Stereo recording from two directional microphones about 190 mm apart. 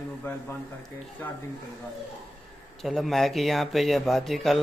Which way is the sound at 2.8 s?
Centre (ahead or behind).